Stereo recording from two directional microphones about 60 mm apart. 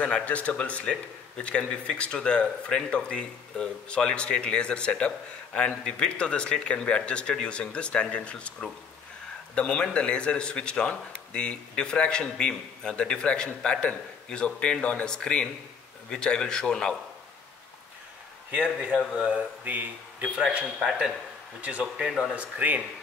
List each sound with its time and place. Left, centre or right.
0.0 s speech: left
18.5 s speech: right
19.6 s speech: right
21.5 s speech: right
22.0 s speech: centre
22.3 s speech: right